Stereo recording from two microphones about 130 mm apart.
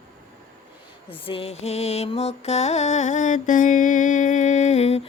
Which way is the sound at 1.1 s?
45° left (ahead or behind).